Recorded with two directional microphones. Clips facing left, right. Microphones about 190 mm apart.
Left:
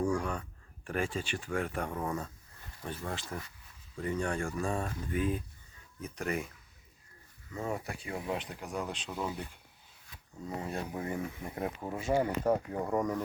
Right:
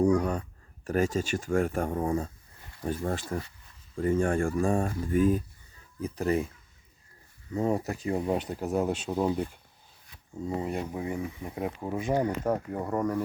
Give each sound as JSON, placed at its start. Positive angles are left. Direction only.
{"t": 0.2, "sound": "speech", "side_deg": -40}
{"t": 6.0, "sound": "speech", "side_deg": -30}
{"t": 7.5, "sound": "speech", "side_deg": -35}
{"t": 10.4, "sound": "speech", "side_deg": -20}